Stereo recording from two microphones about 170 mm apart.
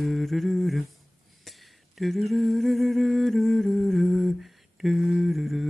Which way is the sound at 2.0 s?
Centre (ahead or behind).